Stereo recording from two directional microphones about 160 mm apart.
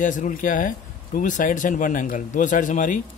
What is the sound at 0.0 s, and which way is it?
Speech, 55° left (ahead or behind).